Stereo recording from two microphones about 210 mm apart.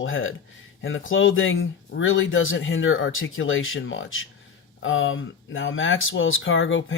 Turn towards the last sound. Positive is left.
turn(degrees=65)  # may be behind; listen again after turning